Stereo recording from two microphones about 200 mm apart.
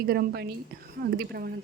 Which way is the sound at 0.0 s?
50° right (ahead or behind).